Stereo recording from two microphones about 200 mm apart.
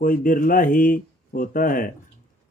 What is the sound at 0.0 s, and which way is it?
A man's voice, 45° left (ahead or behind).